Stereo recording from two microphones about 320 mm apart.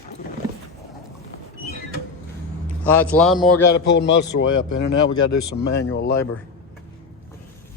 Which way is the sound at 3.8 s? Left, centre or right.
Left.